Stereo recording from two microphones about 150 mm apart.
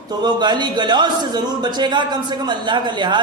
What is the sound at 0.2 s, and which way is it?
A man's voice, 30° right (ahead or behind).